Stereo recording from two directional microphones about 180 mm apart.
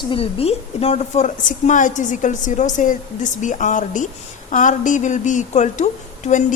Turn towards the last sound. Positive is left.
turn(degrees=45)  # may be behind; listen again after turning